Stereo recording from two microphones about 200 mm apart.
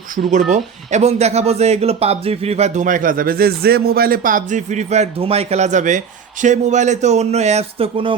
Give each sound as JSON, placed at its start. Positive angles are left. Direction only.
{"t": 0.2, "sound": "speech", "side_deg": -35}